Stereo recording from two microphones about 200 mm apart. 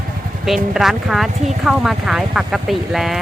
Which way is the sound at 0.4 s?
Centre (ahead or behind).